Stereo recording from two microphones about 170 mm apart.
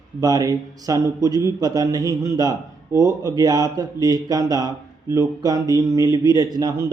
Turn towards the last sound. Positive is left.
turn(degrees=-20)  # may be behind; listen again after turning